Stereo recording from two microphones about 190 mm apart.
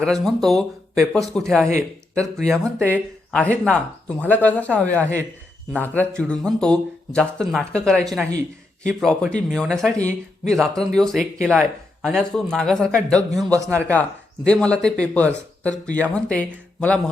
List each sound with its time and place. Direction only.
0.0 s speech: centre (ahead or behind)
13.5 s speech: 15° right (ahead or behind)
13.8 s speech: 10° left (ahead or behind)